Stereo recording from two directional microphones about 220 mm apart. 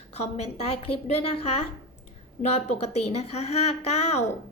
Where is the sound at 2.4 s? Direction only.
30° left (ahead or behind).